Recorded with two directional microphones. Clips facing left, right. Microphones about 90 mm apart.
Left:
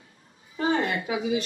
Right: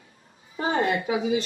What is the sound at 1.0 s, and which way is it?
Speech, 30° right (ahead or behind).